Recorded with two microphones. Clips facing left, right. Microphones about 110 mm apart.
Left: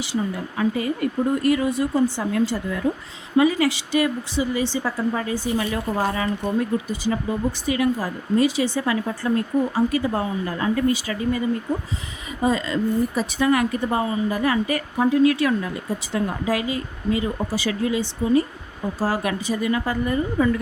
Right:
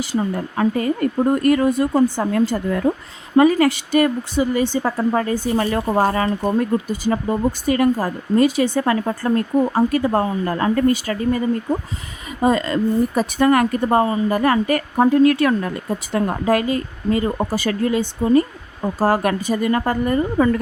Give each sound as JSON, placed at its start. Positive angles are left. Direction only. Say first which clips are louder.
{"t": 0.0, "sound": "speech", "louder": "right 4 dB", "side_deg": -45}